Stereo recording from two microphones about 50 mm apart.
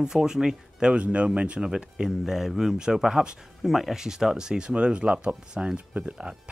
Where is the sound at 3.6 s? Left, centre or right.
Centre.